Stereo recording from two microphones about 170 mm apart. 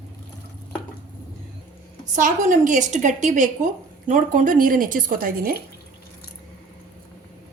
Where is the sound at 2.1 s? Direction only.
50° right (ahead or behind).